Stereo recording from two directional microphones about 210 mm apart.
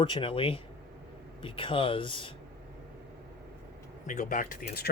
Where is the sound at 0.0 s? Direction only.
25° left (ahead or behind).